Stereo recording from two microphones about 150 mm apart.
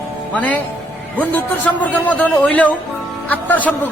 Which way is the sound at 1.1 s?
10° left (ahead or behind).